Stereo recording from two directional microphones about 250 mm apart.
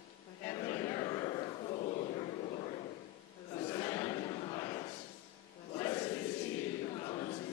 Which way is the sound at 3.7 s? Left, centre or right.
Centre.